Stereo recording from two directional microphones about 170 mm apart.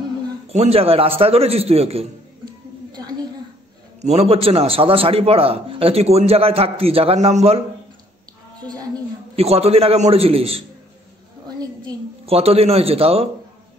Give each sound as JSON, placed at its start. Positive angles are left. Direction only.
{"t": 0.5, "sound": "a man's voice", "side_deg": -35}
{"t": 4.0, "sound": "a man's voice", "side_deg": -40}
{"t": 9.3, "sound": "a man's voice", "side_deg": -35}
{"t": 12.3, "sound": "a man's voice", "side_deg": -35}